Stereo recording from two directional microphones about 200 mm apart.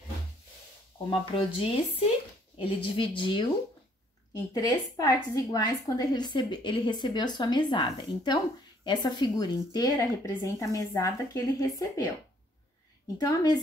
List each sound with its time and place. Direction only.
0.9 s a woman's voice: 25° left (ahead or behind)